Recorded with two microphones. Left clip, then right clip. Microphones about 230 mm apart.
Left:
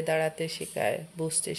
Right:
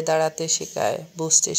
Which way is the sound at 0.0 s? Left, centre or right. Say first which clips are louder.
Right 6 dB; centre.